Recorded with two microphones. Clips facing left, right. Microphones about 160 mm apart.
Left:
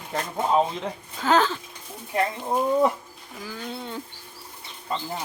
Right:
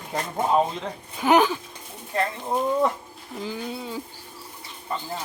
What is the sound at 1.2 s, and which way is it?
Speech, 15° right (ahead or behind).